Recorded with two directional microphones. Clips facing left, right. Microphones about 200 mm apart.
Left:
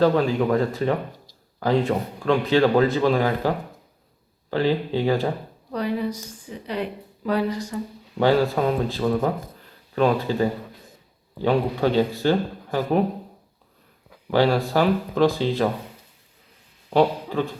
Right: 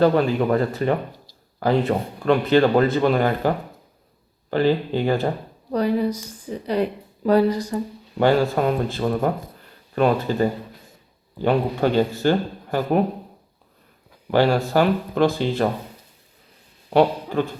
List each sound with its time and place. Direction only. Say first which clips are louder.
0.0 s a man's voice: right 1 dB; centre (ahead or behind)
4.5 s a man's voice: right 2 dB; centre (ahead or behind)
5.7 s speech: right 5 dB; 40° right (ahead or behind)
8.2 s a man's voice: right 1 dB; centre (ahead or behind)
11.4 s a man's voice: right 1 dB; centre (ahead or behind)
14.3 s a man's voice: right 1 dB; centre (ahead or behind)
16.9 s speech: right 2 dB; centre (ahead or behind)